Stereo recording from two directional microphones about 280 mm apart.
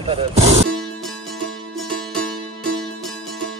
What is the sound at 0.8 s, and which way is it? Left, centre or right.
Music, centre.